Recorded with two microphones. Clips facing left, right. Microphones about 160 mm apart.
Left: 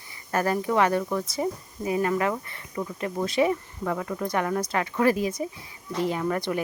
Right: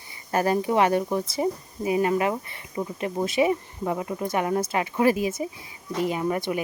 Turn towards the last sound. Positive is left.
turn(degrees=-15)  # may be behind; listen again after turning